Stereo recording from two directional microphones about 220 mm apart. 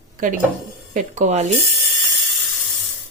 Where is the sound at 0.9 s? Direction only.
35° right (ahead or behind).